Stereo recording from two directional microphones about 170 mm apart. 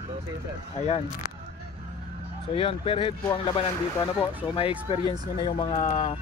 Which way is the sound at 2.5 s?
35° left (ahead or behind).